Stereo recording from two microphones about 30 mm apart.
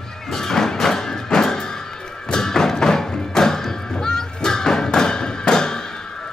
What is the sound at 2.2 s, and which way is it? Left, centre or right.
Thump, left.